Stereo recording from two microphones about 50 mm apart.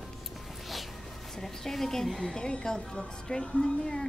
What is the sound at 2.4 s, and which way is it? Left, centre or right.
A woman's voice, centre.